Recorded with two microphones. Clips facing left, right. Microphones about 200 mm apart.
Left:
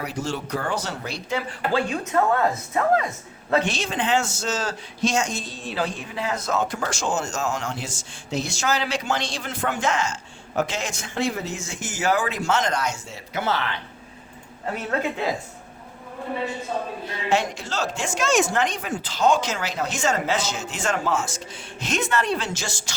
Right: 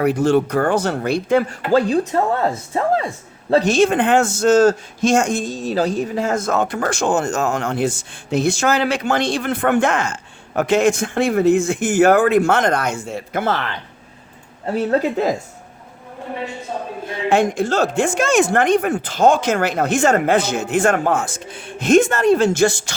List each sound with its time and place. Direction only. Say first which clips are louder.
0.0 s speech: right 13 dB; 55° right (ahead or behind); by 3.1 s 30° right (ahead or behind)
3.5 s a man's voice: right 9 dB; 40° right (ahead or behind)
14.7 s speech: right 8 dB; 35° right (ahead or behind)
17.1 s a man's voice: right 8 dB; 50° right (ahead or behind)